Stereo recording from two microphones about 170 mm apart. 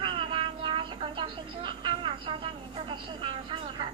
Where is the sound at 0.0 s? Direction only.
30° right (ahead or behind).